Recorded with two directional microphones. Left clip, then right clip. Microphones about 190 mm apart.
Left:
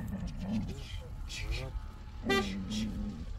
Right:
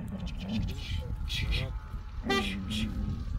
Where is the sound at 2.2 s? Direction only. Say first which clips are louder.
Right 1 dB; 35° left (ahead or behind).